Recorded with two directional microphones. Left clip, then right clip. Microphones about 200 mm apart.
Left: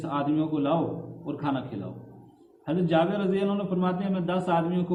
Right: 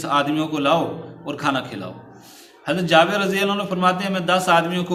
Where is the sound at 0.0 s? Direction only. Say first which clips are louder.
Right 8 dB; 15° right (ahead or behind).